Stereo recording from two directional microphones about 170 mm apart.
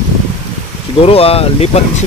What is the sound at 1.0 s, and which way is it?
Speech, 35° left (ahead or behind).